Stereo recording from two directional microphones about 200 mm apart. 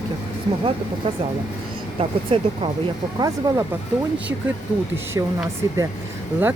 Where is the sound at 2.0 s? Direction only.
25° right (ahead or behind).